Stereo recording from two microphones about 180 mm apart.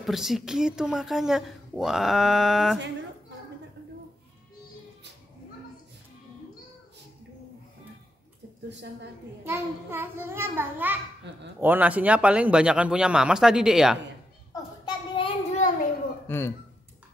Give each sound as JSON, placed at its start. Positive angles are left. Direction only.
{"t": 0.0, "sound": "a woman's voice", "side_deg": 0}
{"t": 9.4, "sound": "a child's voice", "side_deg": -15}
{"t": 11.3, "sound": "speech", "side_deg": -75}
{"t": 11.6, "sound": "a woman's voice", "side_deg": -10}
{"t": 14.5, "sound": "a sound", "side_deg": 25}
{"t": 16.3, "sound": "speech", "side_deg": 15}